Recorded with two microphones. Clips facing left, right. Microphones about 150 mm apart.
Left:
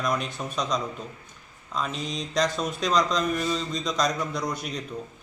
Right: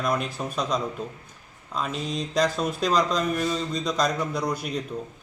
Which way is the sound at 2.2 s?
5° right (ahead or behind).